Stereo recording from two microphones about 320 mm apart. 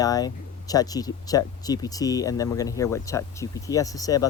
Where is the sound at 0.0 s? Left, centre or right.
Centre.